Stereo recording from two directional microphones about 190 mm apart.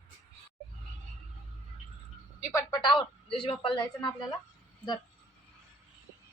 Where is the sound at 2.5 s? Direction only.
20° left (ahead or behind).